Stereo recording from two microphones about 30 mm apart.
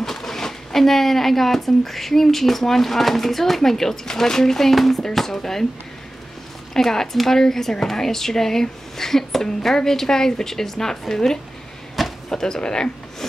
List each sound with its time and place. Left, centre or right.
0.0 s speech: centre
6.7 s speech: centre